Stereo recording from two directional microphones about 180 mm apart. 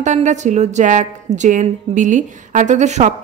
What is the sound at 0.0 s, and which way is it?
A woman's voice, 40° right (ahead or behind).